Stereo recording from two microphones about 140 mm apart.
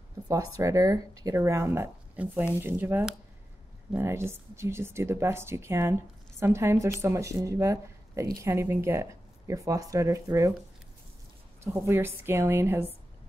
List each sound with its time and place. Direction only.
0.3 s a woman's voice: 25° right (ahead or behind)
11.6 s a woman's voice: 20° right (ahead or behind)